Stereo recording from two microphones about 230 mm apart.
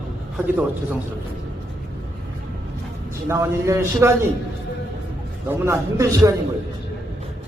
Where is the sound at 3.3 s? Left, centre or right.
Centre.